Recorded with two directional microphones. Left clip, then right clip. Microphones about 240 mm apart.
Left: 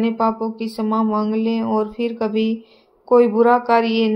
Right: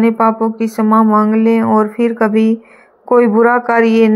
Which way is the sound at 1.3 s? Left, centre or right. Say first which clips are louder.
Right 9 dB; right.